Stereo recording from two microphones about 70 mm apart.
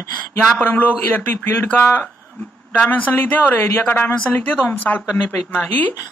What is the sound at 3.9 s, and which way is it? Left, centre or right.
A man's voice, left.